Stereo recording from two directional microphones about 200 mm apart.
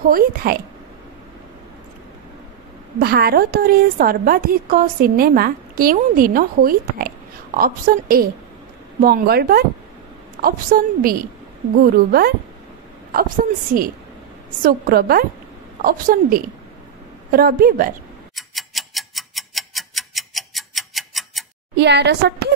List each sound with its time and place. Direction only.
0.0 s a woman's voice: 45° right (ahead or behind)
3.0 s a woman's voice: 50° right (ahead or behind)
14.6 s a woman's voice: 45° right (ahead or behind)
18.3 s tick-tock: centre (ahead or behind)
21.7 s a woman's voice: 60° right (ahead or behind)